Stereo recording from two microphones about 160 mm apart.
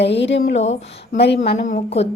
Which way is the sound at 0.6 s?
45° left (ahead or behind).